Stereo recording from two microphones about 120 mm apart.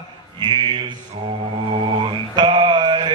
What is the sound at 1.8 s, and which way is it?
Mantra, 45° right (ahead or behind).